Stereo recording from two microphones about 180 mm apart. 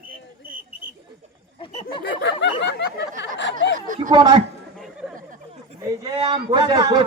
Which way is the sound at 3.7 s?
45° right (ahead or behind).